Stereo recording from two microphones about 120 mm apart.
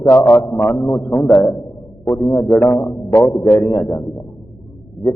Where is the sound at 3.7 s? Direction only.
Centre (ahead or behind).